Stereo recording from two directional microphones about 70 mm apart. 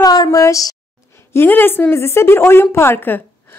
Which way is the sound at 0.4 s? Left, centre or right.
Left.